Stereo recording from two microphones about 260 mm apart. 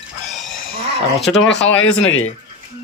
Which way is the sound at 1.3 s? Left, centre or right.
Left.